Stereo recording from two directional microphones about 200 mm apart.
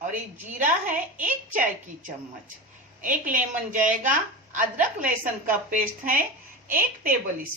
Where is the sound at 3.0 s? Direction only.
40° right (ahead or behind).